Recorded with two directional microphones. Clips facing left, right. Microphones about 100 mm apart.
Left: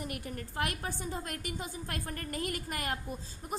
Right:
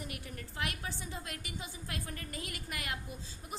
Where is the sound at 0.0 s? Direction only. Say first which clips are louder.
Left 5 dB; 45° left (ahead or behind).